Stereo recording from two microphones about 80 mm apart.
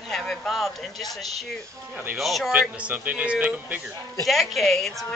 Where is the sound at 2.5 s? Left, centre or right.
Centre.